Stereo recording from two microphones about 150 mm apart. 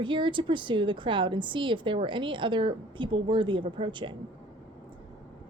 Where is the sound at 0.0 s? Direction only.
35° right (ahead or behind).